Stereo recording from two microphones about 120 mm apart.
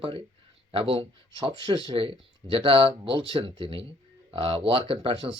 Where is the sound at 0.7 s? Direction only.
50° right (ahead or behind).